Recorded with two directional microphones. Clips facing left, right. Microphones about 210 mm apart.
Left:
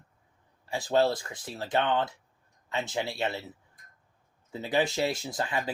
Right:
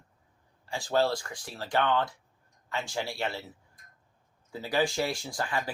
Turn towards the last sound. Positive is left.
turn(degrees=20)  # may be behind; listen again after turning